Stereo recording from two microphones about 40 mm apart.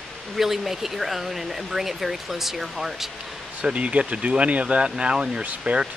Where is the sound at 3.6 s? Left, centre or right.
Right.